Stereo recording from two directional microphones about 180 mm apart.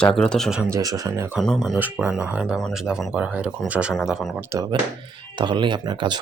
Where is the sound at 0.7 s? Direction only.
20° right (ahead or behind).